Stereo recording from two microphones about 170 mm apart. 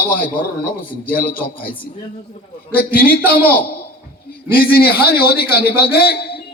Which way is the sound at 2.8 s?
60° left (ahead or behind).